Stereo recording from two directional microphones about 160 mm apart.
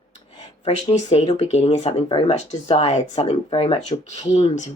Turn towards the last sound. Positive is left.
turn(degrees=45)  # may be behind; listen again after turning